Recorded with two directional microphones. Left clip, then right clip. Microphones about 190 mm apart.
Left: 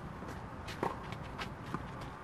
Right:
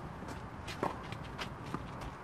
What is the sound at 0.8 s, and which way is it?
Walk, 25° left (ahead or behind).